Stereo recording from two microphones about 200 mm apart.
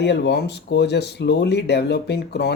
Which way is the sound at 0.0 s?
55° left (ahead or behind).